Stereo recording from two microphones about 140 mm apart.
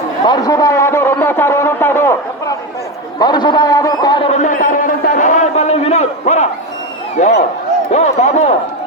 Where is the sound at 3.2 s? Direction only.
30° left (ahead or behind).